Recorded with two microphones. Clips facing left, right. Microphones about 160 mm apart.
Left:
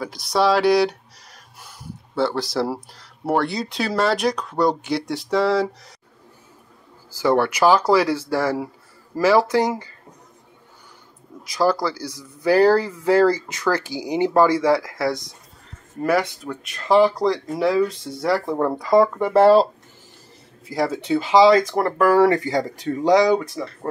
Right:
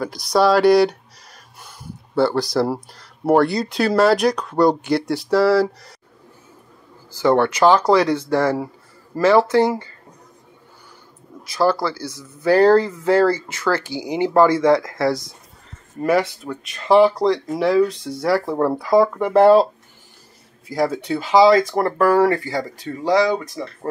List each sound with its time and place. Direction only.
0.0 s speech: centre (ahead or behind)
7.1 s speech: 10° left (ahead or behind)
11.4 s speech: 15° left (ahead or behind)
20.7 s speech: centre (ahead or behind)
22.1 s speech: 15° left (ahead or behind)
23.5 s speech: centre (ahead or behind)